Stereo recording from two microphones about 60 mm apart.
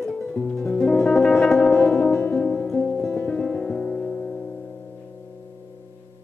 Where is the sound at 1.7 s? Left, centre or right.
Left.